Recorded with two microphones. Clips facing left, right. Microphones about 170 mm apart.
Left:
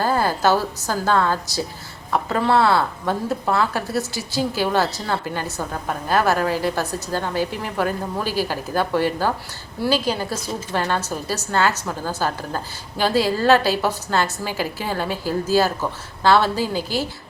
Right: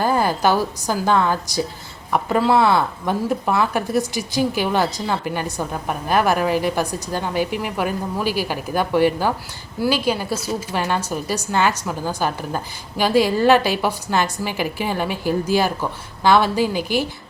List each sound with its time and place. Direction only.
0.0 s a woman's voice: 15° right (ahead or behind)